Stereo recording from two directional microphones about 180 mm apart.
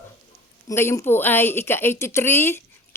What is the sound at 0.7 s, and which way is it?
Speech, 15° left (ahead or behind).